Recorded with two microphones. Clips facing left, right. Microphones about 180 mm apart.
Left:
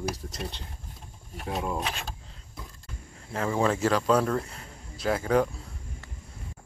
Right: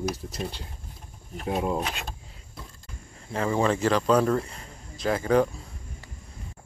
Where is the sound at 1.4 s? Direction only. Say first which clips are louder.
Right 4 dB; 20° right (ahead or behind).